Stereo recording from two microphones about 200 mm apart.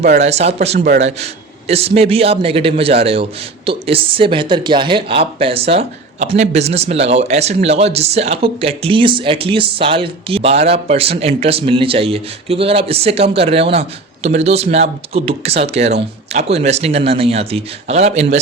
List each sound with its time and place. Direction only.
0.2 s a man's voice: 35° right (ahead or behind)